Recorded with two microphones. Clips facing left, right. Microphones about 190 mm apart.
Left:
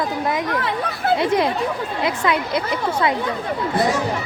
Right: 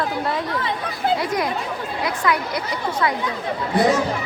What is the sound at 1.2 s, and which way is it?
A woman's voice, 25° left (ahead or behind).